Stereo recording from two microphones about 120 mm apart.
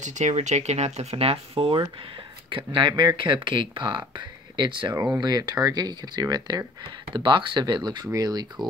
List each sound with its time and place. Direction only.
0.0 s speech: 80° right; by 4.9 s 40° right (ahead or behind)
4.9 s speech: 30° right (ahead or behind)